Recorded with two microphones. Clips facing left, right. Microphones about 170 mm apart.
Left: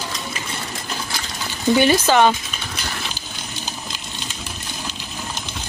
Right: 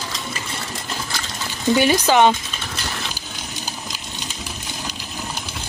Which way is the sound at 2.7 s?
Centre (ahead or behind).